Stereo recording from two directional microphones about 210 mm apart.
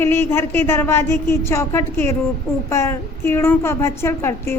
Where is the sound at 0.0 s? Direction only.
10° left (ahead or behind).